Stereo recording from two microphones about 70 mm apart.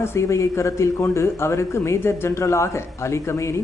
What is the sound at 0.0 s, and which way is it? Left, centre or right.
Speech, left.